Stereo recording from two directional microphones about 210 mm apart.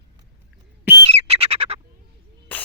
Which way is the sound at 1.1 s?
30° right (ahead or behind).